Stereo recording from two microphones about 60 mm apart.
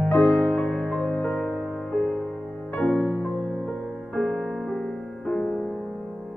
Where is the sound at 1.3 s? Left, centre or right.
Centre.